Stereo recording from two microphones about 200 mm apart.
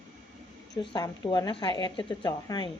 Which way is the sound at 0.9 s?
20° left (ahead or behind).